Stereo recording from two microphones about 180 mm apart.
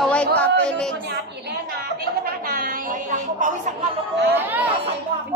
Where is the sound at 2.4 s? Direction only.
50° right (ahead or behind).